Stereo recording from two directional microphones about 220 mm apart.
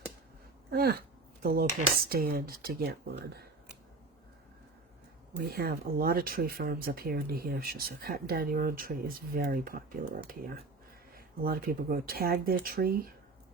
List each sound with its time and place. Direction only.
0.7 s a sound: 45° right (ahead or behind)
2.0 s speech: 45° right (ahead or behind)
5.5 s speech: 45° right (ahead or behind)